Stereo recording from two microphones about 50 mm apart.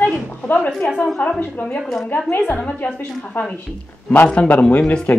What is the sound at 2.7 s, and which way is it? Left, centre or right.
Speech, left.